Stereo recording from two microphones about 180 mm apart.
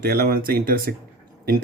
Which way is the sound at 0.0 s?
60° right (ahead or behind).